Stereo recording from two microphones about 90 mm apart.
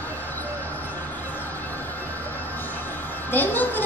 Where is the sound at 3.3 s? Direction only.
20° left (ahead or behind).